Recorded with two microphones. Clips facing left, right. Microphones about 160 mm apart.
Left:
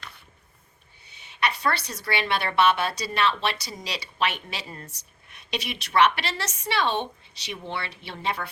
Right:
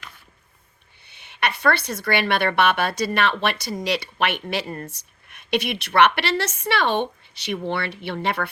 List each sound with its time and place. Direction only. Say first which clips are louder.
1.0 s a woman's voice: right 2 dB; 65° right (ahead or behind)